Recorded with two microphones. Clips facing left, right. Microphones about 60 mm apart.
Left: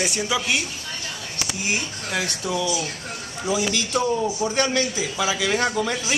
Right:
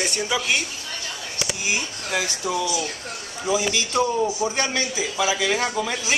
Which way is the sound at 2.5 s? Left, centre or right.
Right.